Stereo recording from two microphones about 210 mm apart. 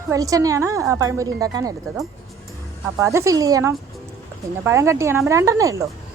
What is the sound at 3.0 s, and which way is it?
Speech, 15° right (ahead or behind).